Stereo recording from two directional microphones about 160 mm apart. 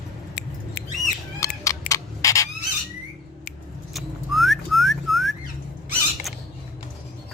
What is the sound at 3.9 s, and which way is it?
Whistling, centre (ahead or behind).